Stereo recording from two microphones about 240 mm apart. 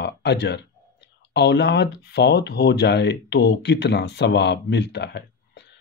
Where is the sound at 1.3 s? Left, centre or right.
Left.